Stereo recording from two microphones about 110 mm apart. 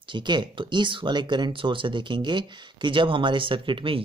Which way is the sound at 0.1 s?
45° right (ahead or behind).